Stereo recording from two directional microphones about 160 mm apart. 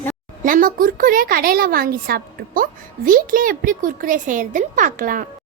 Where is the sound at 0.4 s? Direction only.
60° right (ahead or behind).